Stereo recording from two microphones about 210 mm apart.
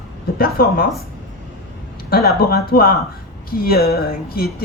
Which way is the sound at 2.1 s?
50° left (ahead or behind).